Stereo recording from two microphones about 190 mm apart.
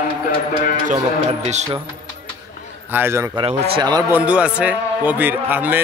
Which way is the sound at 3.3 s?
30° right (ahead or behind).